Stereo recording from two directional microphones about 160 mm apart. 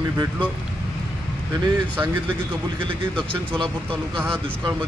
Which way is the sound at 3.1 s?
5° left (ahead or behind).